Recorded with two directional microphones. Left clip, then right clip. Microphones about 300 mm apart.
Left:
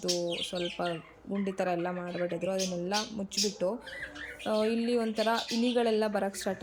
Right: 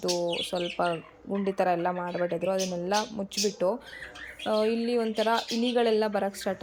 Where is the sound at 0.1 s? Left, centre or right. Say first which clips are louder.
Right 3 dB; centre.